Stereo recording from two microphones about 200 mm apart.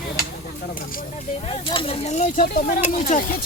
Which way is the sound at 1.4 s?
25° left (ahead or behind).